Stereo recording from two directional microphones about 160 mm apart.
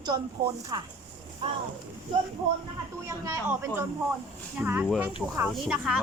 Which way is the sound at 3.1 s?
20° right (ahead or behind).